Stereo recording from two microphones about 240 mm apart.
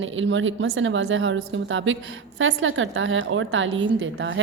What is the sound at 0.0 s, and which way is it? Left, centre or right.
A woman's voice, right.